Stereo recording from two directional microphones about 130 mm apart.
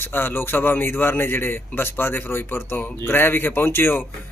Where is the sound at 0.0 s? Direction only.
15° left (ahead or behind).